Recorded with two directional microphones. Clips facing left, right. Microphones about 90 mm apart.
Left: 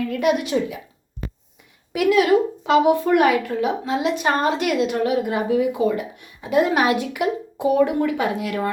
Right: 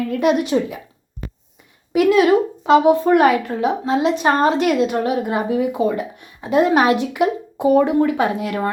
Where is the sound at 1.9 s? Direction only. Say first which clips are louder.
Right 3 dB; 30° right (ahead or behind).